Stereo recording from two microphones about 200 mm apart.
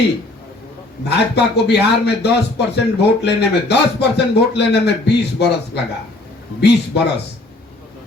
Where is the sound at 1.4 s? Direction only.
55° left (ahead or behind).